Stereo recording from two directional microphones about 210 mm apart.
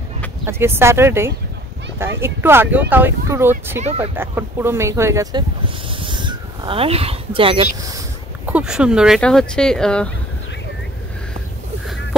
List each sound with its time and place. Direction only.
0.5 s speech: 10° right (ahead or behind)
5.9 s a sound: 25° right (ahead or behind)
8.5 s speech: 5° right (ahead or behind)